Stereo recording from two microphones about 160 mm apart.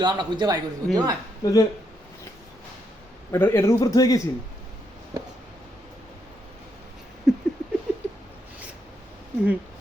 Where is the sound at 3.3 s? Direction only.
15° left (ahead or behind).